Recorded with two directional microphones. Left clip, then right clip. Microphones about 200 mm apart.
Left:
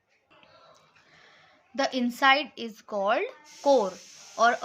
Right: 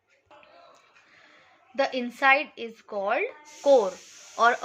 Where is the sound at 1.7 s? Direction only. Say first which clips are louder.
Right 1 dB; 25° left (ahead or behind).